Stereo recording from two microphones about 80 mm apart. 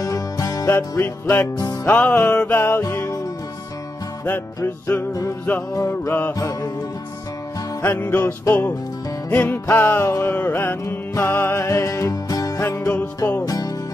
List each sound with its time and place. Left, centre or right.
0.0 s music: left
0.7 s music: left
2.8 s music: left
5.8 s music: left
6.3 s music: left
7.8 s music: left
12.6 s music: left
13.5 s music: left